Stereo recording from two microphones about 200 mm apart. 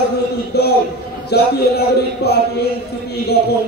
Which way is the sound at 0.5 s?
55° left (ahead or behind).